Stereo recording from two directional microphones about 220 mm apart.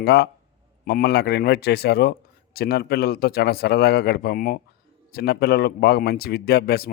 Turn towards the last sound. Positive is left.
turn(degrees=45)  # may be behind; listen again after turning